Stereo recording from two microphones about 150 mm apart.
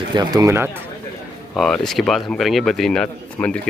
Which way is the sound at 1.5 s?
5° left (ahead or behind).